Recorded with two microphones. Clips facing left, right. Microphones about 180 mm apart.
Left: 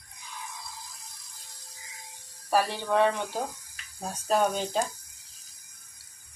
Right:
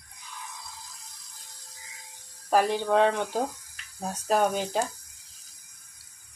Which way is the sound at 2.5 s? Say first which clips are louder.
Right 3 dB; 15° right (ahead or behind).